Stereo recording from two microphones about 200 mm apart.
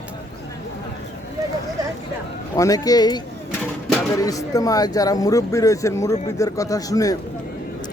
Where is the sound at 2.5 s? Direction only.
15° left (ahead or behind).